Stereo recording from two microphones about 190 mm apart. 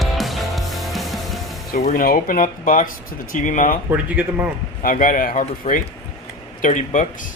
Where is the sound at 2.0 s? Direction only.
50° left (ahead or behind).